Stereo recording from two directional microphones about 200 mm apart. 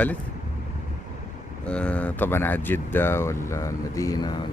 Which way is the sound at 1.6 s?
5° left (ahead or behind).